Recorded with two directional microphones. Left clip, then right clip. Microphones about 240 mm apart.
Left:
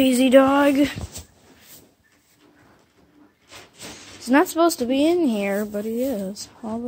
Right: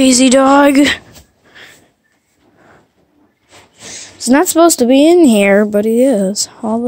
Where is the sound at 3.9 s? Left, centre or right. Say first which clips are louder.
Right 7 dB; right.